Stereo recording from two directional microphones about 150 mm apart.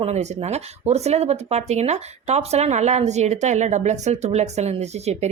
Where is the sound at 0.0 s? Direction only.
45° right (ahead or behind).